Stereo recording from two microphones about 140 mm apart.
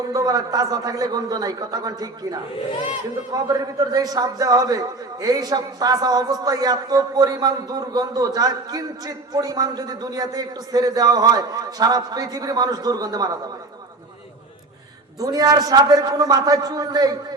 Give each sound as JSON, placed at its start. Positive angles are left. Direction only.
{"t": 0.1, "sound": "a man's voice", "side_deg": -25}
{"t": 15.2, "sound": "a man's voice", "side_deg": -25}